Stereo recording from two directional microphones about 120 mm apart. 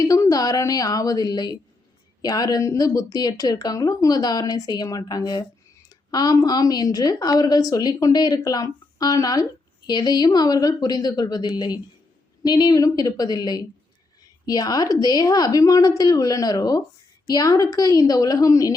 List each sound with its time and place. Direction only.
0.0 s a woman's voice: 30° left (ahead or behind)